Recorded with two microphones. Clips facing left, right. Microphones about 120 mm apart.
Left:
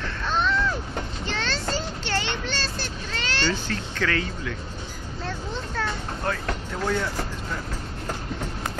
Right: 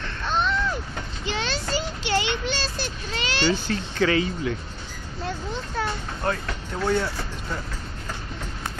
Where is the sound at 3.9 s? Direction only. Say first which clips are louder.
Right 6 dB; 15° right (ahead or behind).